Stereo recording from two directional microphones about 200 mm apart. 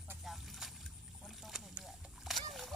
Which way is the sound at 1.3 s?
Centre (ahead or behind).